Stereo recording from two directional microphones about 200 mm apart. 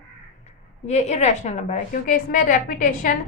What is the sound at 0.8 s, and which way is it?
A woman's voice, 35° left (ahead or behind).